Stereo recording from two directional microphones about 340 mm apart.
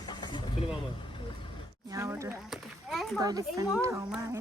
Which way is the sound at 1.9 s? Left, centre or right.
Centre.